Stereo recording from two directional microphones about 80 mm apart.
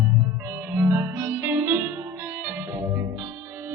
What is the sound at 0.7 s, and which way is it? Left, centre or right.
Music, right.